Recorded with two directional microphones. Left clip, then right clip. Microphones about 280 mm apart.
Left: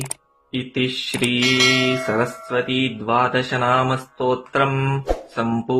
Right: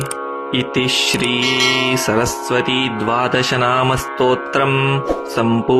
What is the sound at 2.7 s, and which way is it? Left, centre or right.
Music, right.